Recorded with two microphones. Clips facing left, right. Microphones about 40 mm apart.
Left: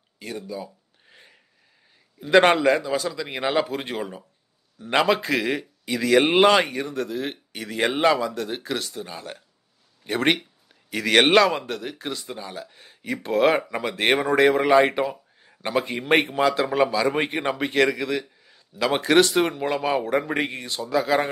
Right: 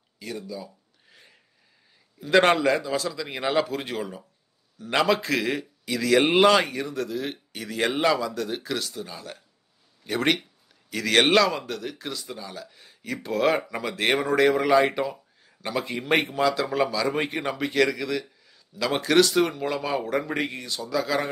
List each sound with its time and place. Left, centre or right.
0.2 s speech: left
1.0 s rub: centre
2.1 s a man's voice: centre